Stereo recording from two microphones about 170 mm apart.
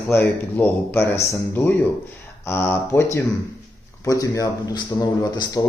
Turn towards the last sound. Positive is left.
turn(degrees=20)  # may be behind; listen again after turning